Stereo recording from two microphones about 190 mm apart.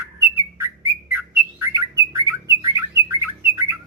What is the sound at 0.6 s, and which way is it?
Bird, 15° right (ahead or behind).